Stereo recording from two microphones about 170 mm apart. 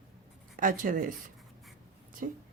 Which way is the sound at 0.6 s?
55° right (ahead or behind).